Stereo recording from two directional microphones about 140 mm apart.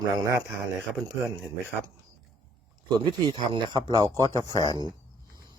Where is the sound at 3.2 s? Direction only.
35° right (ahead or behind).